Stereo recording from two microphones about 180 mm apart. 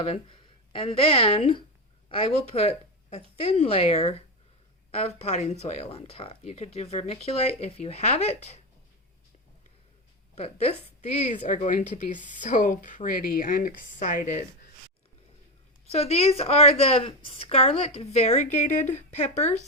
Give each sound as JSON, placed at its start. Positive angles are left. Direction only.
{"t": 0.0, "sound": "speech", "side_deg": 30}
{"t": 10.3, "sound": "a woman's voice", "side_deg": 35}
{"t": 15.9, "sound": "speech", "side_deg": 35}